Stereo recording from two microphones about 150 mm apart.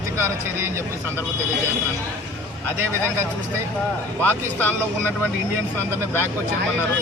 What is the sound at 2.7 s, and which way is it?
Speech, 15° right (ahead or behind).